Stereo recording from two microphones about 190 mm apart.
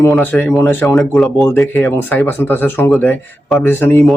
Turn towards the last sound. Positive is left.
turn(degrees=10)  # may be behind; listen again after turning